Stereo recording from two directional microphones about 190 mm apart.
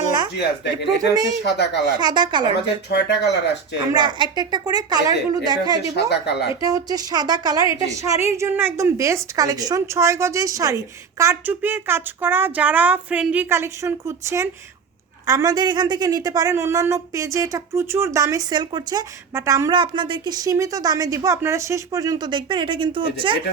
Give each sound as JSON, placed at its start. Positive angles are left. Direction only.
{"t": 0.9, "sound": "a woman's voice", "side_deg": -20}
{"t": 1.4, "sound": "speech", "side_deg": 65}
{"t": 2.0, "sound": "a woman's voice", "side_deg": -25}
{"t": 2.9, "sound": "speech", "side_deg": 65}
{"t": 3.9, "sound": "a woman's voice", "side_deg": -25}
{"t": 6.1, "sound": "speech", "side_deg": 60}
{"t": 6.7, "sound": "a woman's voice", "side_deg": -20}